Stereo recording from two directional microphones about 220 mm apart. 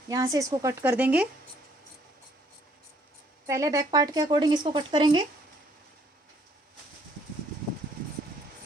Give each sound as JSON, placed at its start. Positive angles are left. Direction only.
{"t": 0.1, "sound": "a woman's voice", "side_deg": -15}
{"t": 3.4, "sound": "speech", "side_deg": -15}